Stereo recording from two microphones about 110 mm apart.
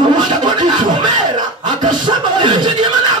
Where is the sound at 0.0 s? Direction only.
45° right (ahead or behind).